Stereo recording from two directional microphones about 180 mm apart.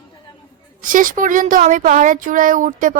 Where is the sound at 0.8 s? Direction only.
45° right (ahead or behind).